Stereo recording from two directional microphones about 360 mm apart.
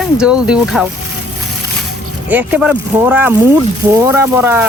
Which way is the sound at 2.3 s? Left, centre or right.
Centre.